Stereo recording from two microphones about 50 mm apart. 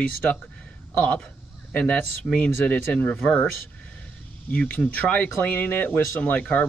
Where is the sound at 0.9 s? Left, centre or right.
Left.